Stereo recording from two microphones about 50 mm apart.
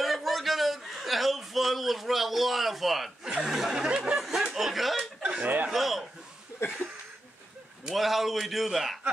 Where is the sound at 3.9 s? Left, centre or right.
Centre.